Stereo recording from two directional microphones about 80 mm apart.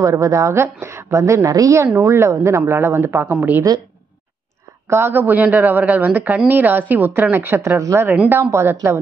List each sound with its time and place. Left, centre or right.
0.0 s a woman's voice: right
4.8 s a woman's voice: right